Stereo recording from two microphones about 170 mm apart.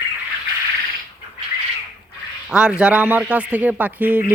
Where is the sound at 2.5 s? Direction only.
5° right (ahead or behind).